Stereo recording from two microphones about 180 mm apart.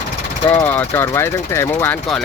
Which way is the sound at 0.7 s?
10° left (ahead or behind).